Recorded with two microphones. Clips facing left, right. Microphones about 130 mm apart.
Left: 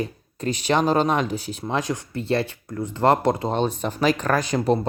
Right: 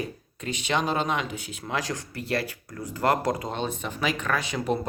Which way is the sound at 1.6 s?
25° left (ahead or behind).